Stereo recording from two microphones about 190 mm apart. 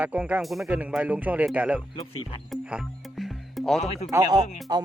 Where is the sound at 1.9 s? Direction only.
30° left (ahead or behind).